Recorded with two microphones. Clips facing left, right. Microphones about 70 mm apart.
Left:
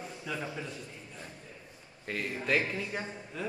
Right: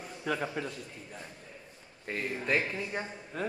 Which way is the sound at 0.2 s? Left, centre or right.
Right.